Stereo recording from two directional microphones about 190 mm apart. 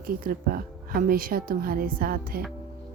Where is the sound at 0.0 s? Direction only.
50° right (ahead or behind).